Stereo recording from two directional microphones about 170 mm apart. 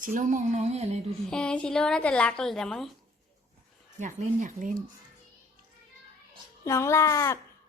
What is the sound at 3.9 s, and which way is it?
Speech, 45° right (ahead or behind).